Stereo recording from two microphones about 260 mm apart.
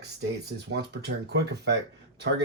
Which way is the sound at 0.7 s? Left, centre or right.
Right.